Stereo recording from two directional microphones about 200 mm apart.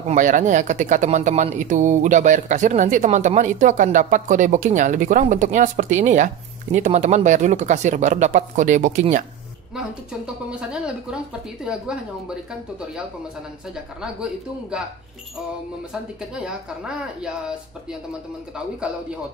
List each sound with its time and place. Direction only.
0.1 s speech: 40° right (ahead or behind)
9.8 s speech: 5° right (ahead or behind)
15.9 s speech: 5° right (ahead or behind)